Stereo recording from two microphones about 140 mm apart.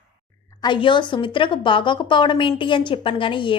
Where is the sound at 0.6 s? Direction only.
35° left (ahead or behind).